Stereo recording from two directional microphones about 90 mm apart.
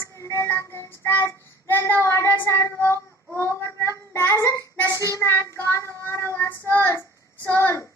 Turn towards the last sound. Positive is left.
turn(degrees=30)  # may be behind; listen again after turning